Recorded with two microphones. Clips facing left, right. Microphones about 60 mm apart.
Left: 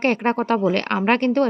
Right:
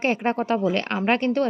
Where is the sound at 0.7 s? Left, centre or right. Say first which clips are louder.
Left 3 dB; left.